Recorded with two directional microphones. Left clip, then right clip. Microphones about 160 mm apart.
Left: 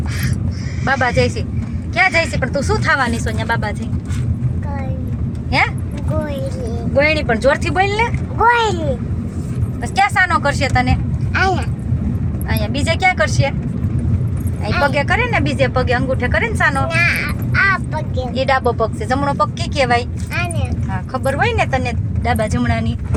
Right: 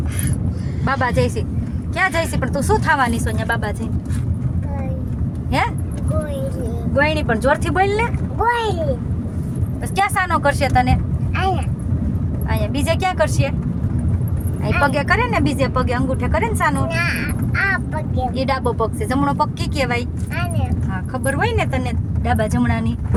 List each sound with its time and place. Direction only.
0.9 s speech: 20° right (ahead or behind)
5.5 s speech: 25° right (ahead or behind)
6.9 s speech: 20° right (ahead or behind)
8.4 s speech: 5° left (ahead or behind)
9.9 s speech: 15° right (ahead or behind)
11.3 s speech: 5° left (ahead or behind)
12.5 s speech: 20° right (ahead or behind)
14.8 s speech: 25° right (ahead or behind)
16.9 s speech: centre (ahead or behind)
18.3 s speech: 25° right (ahead or behind)
21.1 s speech: 25° right (ahead or behind)